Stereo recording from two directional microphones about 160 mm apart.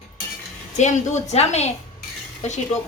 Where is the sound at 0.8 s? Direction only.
45° left (ahead or behind).